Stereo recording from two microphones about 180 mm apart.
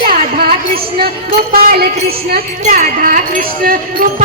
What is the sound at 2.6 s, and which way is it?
Speech, 45° right (ahead or behind).